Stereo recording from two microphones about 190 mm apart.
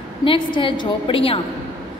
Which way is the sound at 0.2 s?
25° left (ahead or behind).